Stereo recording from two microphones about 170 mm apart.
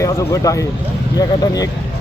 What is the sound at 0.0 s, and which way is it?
Speech, 20° left (ahead or behind).